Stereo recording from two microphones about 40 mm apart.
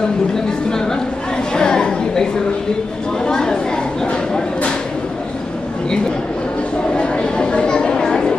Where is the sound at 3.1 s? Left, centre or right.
Centre.